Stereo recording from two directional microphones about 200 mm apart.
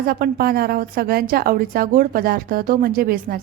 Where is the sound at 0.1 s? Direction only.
50° right (ahead or behind).